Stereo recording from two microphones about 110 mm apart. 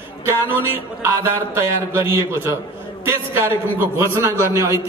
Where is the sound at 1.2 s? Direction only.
25° right (ahead or behind).